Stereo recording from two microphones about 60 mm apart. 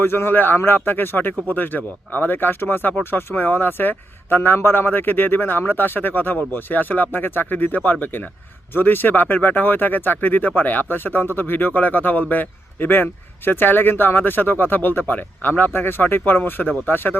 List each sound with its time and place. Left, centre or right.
0.0 s speech: left